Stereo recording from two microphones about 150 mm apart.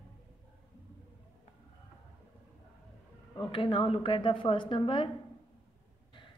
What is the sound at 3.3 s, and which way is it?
A woman's voice, 35° left (ahead or behind).